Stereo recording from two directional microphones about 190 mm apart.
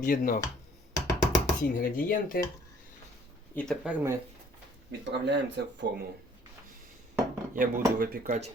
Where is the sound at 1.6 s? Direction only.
50° left (ahead or behind).